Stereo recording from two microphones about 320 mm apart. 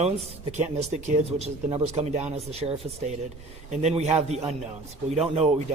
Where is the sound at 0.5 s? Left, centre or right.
Right.